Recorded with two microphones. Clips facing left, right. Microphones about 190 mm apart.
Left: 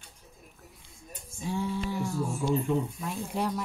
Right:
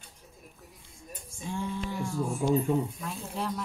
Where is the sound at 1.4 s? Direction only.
10° left (ahead or behind).